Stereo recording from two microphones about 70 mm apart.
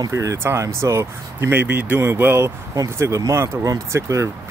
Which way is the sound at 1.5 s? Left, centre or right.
Right.